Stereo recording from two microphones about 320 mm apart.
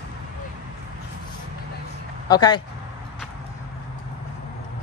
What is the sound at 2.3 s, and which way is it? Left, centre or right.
Speech, centre.